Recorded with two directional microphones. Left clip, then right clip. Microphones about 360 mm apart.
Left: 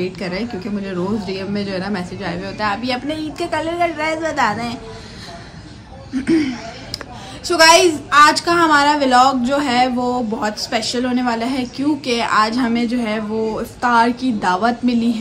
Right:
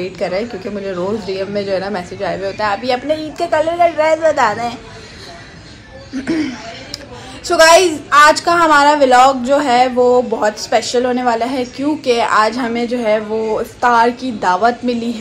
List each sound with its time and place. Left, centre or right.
0.0 s a woman's voice: centre
6.1 s a woman's voice: centre